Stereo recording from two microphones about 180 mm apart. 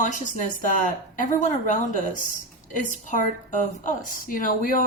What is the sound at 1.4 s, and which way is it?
Speech, 45° left (ahead or behind).